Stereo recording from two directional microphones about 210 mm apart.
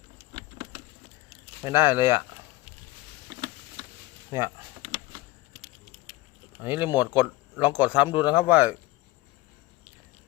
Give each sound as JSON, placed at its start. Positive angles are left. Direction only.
{"t": 1.3, "sound": "speech", "side_deg": -10}
{"t": 3.2, "sound": "a sound", "side_deg": -20}
{"t": 4.3, "sound": "speech", "side_deg": -10}
{"t": 6.6, "sound": "speech", "side_deg": -10}